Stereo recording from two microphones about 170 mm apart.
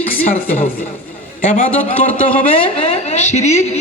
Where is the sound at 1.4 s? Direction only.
50° left (ahead or behind).